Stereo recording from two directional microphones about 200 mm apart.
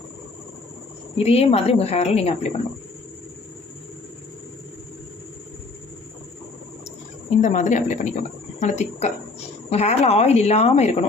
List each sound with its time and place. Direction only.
1.2 s speech: 30° left (ahead or behind)
7.4 s speech: 40° left (ahead or behind)